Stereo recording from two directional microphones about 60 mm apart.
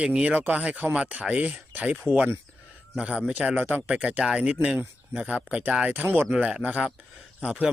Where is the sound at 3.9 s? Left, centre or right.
Centre.